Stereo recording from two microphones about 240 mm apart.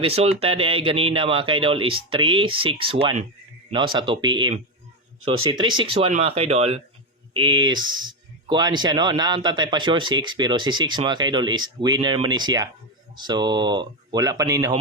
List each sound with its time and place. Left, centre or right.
0.0 s speech: right